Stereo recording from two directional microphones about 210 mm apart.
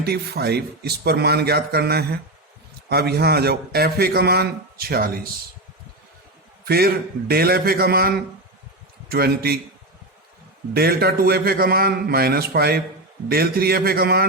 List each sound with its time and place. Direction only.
0.0 s a man's voice: 50° right (ahead or behind)
6.7 s a man's voice: 45° right (ahead or behind)
10.8 s a man's voice: 45° right (ahead or behind)